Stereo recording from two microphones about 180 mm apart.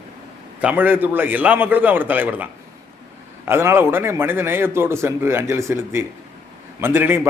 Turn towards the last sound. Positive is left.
turn(degrees=-10)  # may be behind; listen again after turning